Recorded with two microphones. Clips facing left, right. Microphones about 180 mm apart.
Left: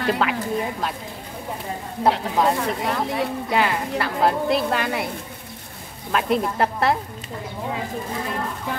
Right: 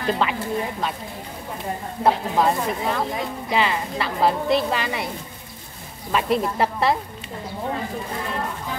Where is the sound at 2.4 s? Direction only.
Centre (ahead or behind).